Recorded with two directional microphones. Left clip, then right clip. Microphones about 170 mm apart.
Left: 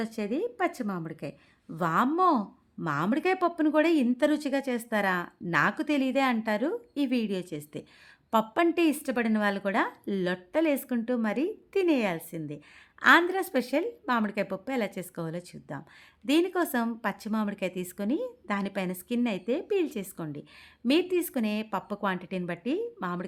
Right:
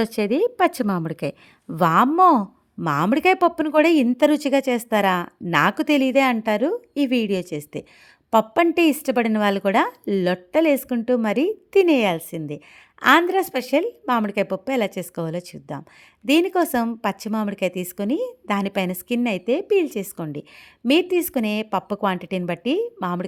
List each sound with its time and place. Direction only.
0.0 s a woman's voice: 60° right (ahead or behind); by 23.2 s 40° right (ahead or behind)